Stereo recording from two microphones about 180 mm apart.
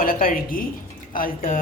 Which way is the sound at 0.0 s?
50° left (ahead or behind).